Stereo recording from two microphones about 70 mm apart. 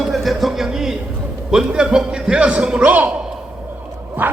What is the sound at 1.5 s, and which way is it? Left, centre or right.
A man's voice, centre.